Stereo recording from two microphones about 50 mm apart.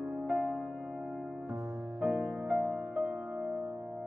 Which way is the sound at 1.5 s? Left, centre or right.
Right.